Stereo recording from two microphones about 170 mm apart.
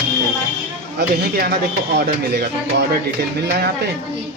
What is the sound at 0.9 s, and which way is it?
Speech, 70° right (ahead or behind).